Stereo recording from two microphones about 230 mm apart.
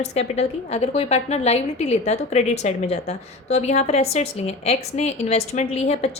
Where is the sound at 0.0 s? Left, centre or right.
Left.